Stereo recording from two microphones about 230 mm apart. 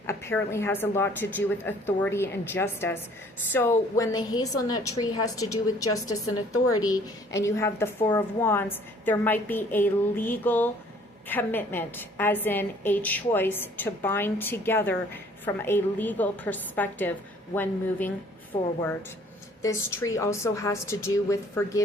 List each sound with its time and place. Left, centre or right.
0.1 s a woman's voice: centre